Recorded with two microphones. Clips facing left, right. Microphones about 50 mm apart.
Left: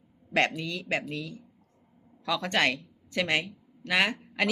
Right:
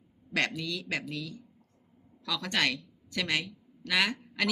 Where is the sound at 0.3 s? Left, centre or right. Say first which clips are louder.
Left 4 dB; left.